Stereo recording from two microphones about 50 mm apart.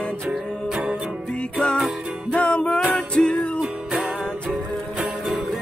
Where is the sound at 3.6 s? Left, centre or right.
Right.